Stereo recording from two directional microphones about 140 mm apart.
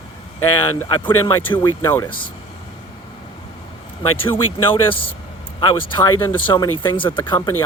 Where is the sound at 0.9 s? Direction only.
30° left (ahead or behind).